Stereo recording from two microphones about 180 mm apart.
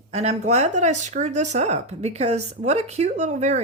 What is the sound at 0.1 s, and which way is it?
Speech, 35° right (ahead or behind).